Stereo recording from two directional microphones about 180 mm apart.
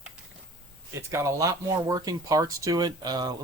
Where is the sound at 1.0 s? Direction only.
15° right (ahead or behind).